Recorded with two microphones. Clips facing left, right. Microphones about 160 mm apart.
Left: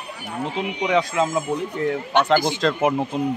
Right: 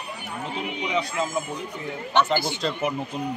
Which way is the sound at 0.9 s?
90° left.